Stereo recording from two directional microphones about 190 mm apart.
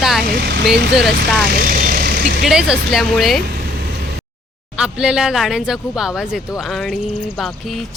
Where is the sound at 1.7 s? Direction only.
55° right (ahead or behind).